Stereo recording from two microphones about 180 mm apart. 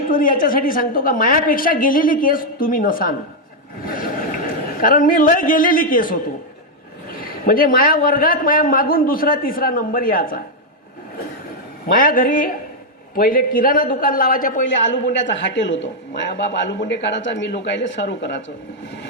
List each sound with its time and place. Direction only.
0.1 s a man's voice: 50° left (ahead or behind)
4.8 s a man's voice: 50° left (ahead or behind)
7.2 s a man's voice: 50° left (ahead or behind)
11.9 s a man's voice: 50° left (ahead or behind)
15.1 s a man's voice: 85° left